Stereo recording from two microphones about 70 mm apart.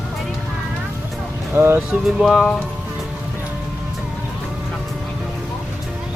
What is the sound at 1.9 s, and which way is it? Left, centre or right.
Speech, centre.